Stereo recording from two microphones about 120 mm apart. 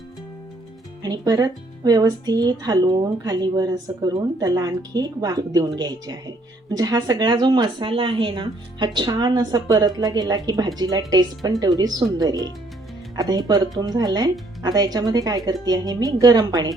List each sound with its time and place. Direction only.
1.0 s speech: 35° right (ahead or behind)